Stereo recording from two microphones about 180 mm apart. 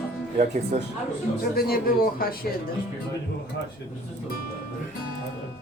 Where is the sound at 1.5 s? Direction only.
55° left (ahead or behind).